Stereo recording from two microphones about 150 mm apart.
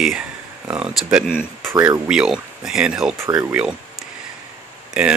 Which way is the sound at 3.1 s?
20° right (ahead or behind).